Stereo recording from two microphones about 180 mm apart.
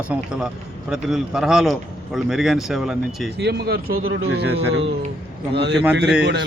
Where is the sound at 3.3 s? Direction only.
65° right (ahead or behind).